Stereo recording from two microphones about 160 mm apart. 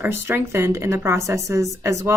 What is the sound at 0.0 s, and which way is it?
Speech, 15° right (ahead or behind).